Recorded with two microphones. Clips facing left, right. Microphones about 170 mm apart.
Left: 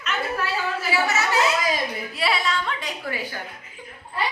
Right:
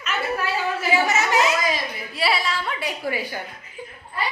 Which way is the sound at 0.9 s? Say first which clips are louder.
Right 2 dB; 15° right (ahead or behind).